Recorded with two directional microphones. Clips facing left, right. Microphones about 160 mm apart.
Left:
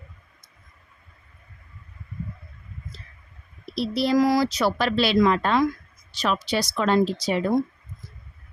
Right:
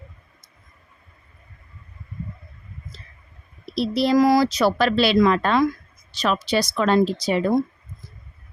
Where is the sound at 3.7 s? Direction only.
90° right.